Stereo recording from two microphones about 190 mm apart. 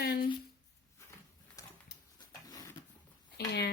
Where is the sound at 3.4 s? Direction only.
60° left (ahead or behind).